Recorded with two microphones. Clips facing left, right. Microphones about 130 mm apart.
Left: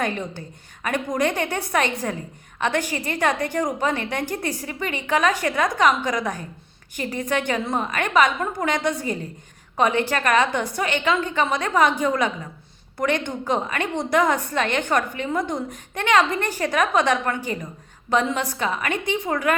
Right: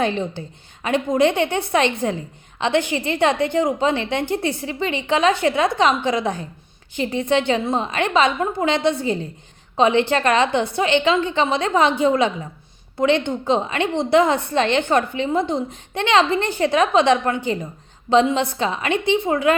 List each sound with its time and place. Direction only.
0.0 s a woman's voice: 25° right (ahead or behind)